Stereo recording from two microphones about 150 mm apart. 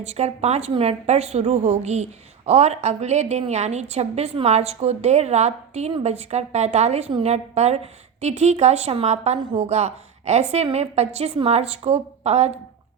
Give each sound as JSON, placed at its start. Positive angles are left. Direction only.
{"t": 0.0, "sound": "a woman's voice", "side_deg": -45}